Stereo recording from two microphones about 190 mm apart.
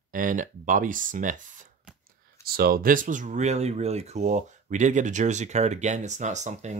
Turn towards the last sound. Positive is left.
turn(degrees=-40)  # may be behind; listen again after turning